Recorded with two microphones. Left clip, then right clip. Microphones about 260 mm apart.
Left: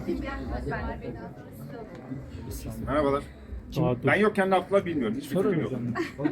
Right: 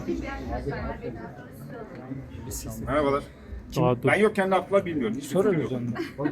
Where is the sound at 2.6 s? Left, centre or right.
Centre.